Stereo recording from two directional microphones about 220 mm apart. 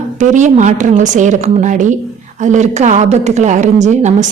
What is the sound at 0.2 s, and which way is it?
A woman's voice, 35° right (ahead or behind).